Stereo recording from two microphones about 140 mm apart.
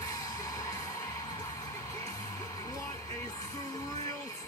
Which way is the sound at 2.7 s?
25° left (ahead or behind).